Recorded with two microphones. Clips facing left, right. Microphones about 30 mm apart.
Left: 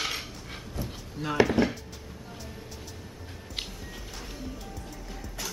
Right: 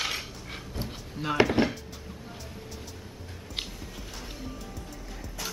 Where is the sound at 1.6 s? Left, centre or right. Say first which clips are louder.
Even; right.